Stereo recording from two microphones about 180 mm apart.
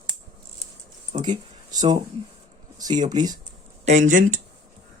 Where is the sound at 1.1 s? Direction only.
40° right (ahead or behind).